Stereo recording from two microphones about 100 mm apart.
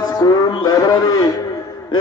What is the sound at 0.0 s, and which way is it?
Music, 40° left (ahead or behind).